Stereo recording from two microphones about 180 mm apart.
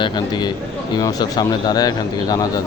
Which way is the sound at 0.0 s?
25° left (ahead or behind).